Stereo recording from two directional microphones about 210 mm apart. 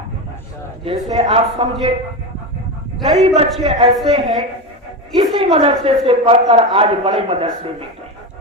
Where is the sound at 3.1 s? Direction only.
30° right (ahead or behind).